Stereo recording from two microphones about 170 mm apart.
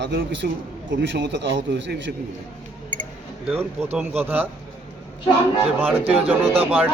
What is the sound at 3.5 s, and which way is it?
Speech, 10° right (ahead or behind).